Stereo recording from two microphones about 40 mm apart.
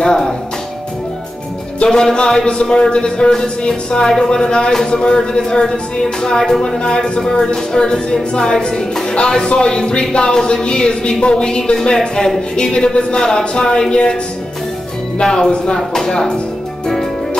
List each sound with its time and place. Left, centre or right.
0.0 s music: centre
1.9 s speech: centre
6.8 s speech: left
15.1 s speech: centre